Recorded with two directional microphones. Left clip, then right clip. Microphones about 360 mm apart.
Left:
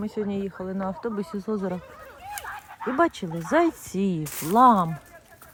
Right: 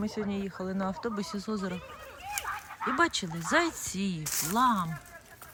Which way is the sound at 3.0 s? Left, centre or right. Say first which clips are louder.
Left 6 dB; centre.